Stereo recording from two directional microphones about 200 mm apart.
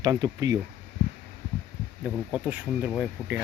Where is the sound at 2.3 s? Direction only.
5° right (ahead or behind).